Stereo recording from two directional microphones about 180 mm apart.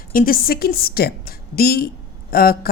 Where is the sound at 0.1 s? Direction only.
50° left (ahead or behind).